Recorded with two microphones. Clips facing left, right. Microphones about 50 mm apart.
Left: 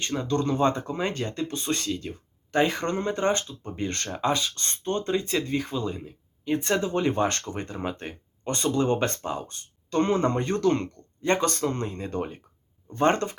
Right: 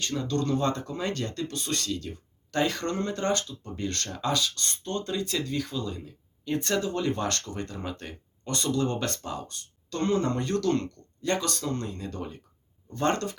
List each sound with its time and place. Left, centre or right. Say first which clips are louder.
0.0 s speech: left 2 dB; left